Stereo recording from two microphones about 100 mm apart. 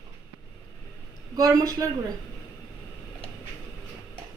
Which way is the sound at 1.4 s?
35° right (ahead or behind).